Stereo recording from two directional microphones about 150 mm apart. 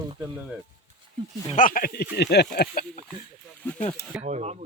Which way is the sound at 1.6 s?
65° left (ahead or behind).